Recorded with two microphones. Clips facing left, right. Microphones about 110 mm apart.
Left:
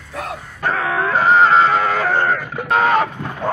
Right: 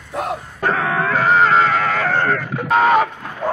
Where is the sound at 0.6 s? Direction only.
Centre (ahead or behind).